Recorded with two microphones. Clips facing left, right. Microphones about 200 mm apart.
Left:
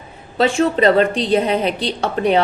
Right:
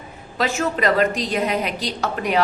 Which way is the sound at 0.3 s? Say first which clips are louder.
Left 7 dB; 30° left (ahead or behind).